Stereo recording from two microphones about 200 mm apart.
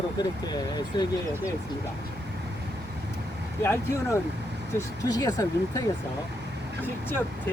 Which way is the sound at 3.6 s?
10° left (ahead or behind).